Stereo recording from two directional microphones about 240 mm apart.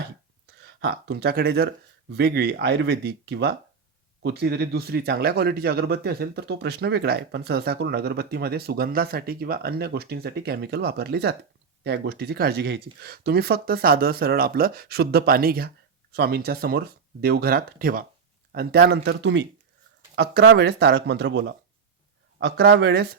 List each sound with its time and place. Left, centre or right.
0.4 s speech: right